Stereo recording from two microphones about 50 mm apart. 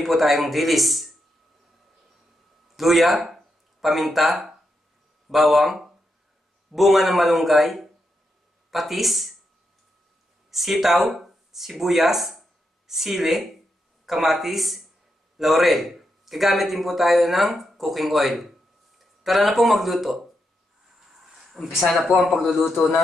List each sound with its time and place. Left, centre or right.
0.0 s a man's voice: centre
2.7 s a man's voice: centre
10.5 s a man's voice: centre
21.4 s a sound: centre
22.2 s a man's voice: centre